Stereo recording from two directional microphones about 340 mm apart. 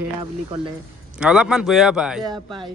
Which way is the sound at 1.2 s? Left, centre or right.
Centre.